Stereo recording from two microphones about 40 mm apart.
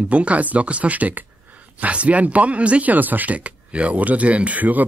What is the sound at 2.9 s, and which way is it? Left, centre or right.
Speech, right.